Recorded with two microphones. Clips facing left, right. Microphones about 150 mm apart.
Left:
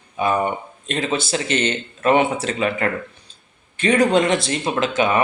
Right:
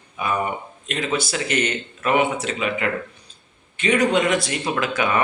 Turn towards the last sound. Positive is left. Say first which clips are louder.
# left 3 dB
turn(degrees=25)  # may be behind; listen again after turning